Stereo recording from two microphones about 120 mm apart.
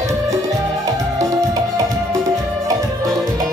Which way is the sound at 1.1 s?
30° right (ahead or behind).